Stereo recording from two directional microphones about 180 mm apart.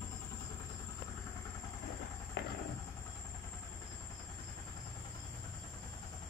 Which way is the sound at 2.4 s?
70° left (ahead or behind).